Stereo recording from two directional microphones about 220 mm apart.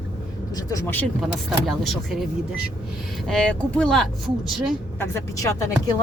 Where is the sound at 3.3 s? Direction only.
5° left (ahead or behind).